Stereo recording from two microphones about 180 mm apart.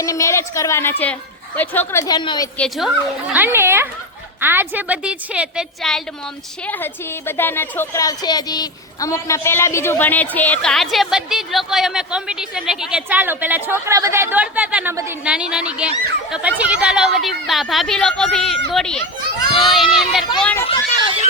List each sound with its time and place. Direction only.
0.0 s a woman's voice: 15° left (ahead or behind)
2.6 s a woman's voice: centre (ahead or behind)
3.3 s a woman's voice: 10° right (ahead or behind)
6.7 s a woman's voice: 10° left (ahead or behind)